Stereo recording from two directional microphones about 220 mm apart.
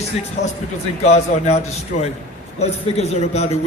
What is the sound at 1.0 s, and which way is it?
Speech, 30° left (ahead or behind).